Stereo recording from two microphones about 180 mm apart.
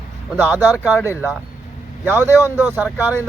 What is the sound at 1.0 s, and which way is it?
Speech, 15° left (ahead or behind).